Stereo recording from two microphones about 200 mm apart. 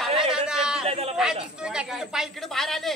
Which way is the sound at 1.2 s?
5° right (ahead or behind).